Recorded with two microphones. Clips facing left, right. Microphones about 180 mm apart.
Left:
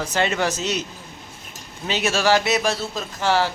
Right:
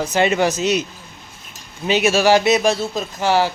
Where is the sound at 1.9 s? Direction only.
10° right (ahead or behind).